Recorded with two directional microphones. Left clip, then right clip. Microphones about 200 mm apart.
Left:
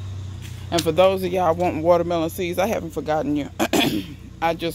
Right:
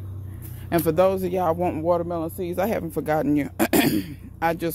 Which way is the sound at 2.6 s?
15° right (ahead or behind).